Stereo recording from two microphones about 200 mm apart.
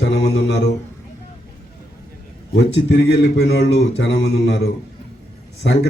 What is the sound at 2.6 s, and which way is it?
A man's voice, 60° left (ahead or behind).